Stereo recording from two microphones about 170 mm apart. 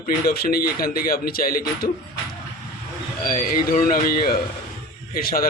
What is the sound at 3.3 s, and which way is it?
Speech, 55° left (ahead or behind).